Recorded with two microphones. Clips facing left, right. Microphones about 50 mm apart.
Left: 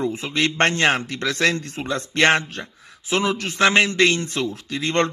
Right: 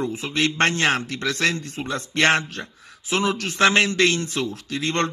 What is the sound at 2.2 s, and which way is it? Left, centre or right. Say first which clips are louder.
A man's voice: left 2 dB; left.